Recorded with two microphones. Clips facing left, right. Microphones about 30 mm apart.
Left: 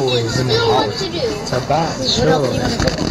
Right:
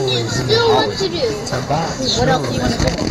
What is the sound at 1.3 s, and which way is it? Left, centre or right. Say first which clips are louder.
Speech: left 2 dB; centre.